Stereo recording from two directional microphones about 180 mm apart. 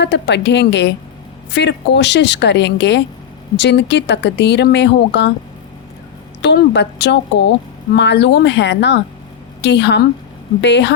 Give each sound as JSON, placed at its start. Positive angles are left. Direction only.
{"t": 0.0, "sound": "speech", "side_deg": 75}
{"t": 6.4, "sound": "speech", "side_deg": 70}